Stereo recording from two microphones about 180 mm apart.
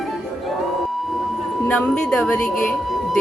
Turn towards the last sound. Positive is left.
turn(degrees=0)  # may be behind; listen again after turning